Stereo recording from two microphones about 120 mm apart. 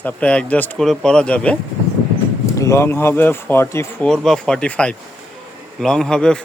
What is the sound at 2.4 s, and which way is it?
Speech, 25° left (ahead or behind).